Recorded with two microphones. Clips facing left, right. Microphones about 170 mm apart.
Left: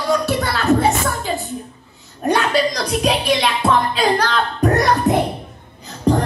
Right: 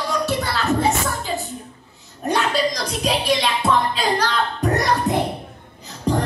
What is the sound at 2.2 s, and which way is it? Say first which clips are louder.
Speech: left 3 dB; 65° left (ahead or behind).